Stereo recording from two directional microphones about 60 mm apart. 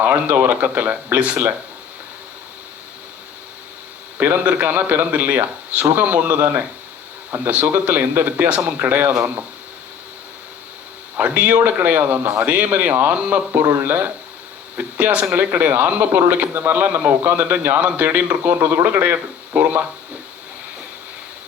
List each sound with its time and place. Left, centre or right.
0.0 s a man's voice: right
4.4 s a man's voice: right
11.2 s speech: right
12.4 s a man's voice: right